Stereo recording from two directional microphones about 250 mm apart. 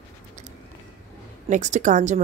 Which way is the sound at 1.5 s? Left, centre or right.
Right.